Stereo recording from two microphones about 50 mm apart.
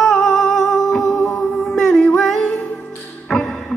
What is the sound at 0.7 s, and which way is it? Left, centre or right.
Music, centre.